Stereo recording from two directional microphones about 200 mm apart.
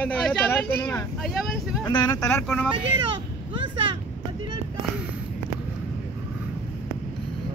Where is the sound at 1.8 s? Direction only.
20° left (ahead or behind).